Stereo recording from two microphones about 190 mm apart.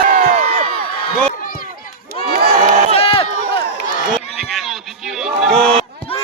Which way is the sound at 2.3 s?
50° right (ahead or behind).